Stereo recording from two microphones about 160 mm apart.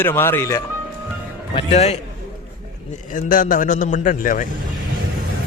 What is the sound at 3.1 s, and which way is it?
A man's voice, 55° left (ahead or behind).